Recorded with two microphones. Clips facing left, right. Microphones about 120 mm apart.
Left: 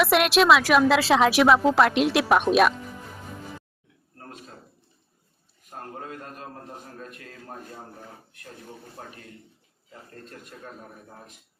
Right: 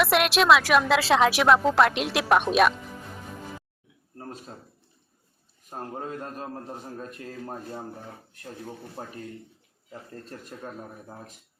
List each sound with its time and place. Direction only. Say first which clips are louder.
0.0 s a woman's voice: left 2 dB; centre (ahead or behind)
5.7 s a man's voice: right 3 dB; 30° right (ahead or behind)
9.0 s a man's voice: right 3 dB; 30° right (ahead or behind)
10.2 s speech: right 3 dB; 35° right (ahead or behind)